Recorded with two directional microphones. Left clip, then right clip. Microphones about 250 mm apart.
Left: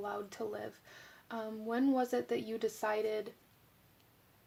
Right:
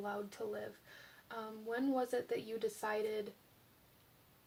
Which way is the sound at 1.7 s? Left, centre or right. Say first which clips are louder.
Left 4 dB; left.